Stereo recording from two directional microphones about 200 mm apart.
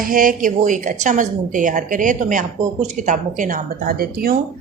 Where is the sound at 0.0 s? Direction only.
45° right (ahead or behind).